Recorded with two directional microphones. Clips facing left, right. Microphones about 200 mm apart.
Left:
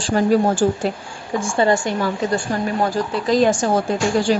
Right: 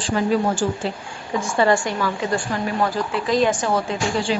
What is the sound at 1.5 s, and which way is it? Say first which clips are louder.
A woman's voice: left 1 dB; 25° left (ahead or behind).